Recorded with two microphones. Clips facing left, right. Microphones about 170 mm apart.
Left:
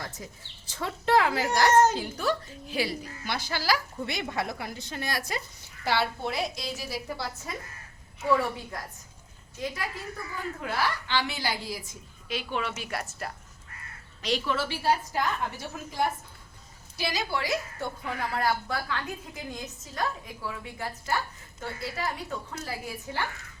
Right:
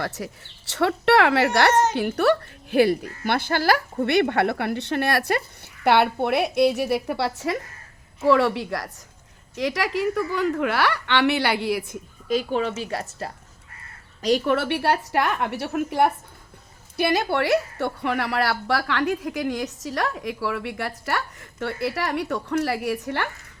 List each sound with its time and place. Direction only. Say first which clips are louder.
0.0 s a woman's voice: right 10 dB; 75° right (ahead or behind)
12.3 s a woman's voice: right 9 dB; 40° right (ahead or behind)
14.2 s a woman's voice: right 8 dB; 45° right (ahead or behind); by 23.3 s 70° right (ahead or behind)